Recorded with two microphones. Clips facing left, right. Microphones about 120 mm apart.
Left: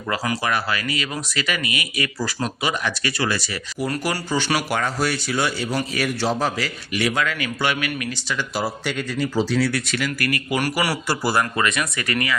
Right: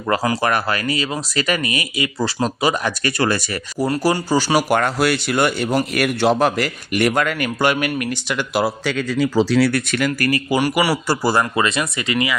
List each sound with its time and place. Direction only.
0.1 s speech: 40° right (ahead or behind)
2.0 s speech: 25° right (ahead or behind); by 3.8 s 50° right (ahead or behind)
3.8 s speech: 30° right (ahead or behind)
4.7 s a man's voice: 65° right (ahead or behind)
10.1 s speech: 35° right (ahead or behind)
10.6 s a man's voice: 5° right (ahead or behind)
11.1 s speech: 45° right (ahead or behind)
11.5 s speech: 25° right (ahead or behind)